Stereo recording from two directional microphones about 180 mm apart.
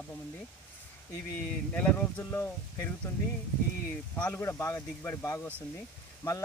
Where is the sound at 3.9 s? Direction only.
10° left (ahead or behind).